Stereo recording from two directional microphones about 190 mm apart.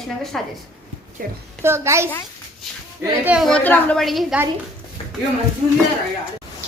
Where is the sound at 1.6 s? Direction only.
15° right (ahead or behind).